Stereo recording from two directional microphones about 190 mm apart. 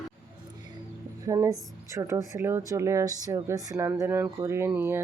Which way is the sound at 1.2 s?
20° right (ahead or behind).